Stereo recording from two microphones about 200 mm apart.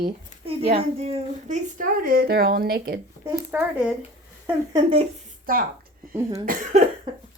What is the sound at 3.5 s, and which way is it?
Cough, 5° right (ahead or behind).